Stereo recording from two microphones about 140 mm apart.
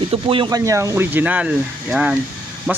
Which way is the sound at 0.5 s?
20° right (ahead or behind).